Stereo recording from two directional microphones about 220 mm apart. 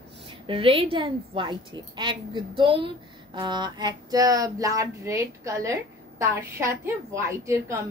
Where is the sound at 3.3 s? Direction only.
20° right (ahead or behind).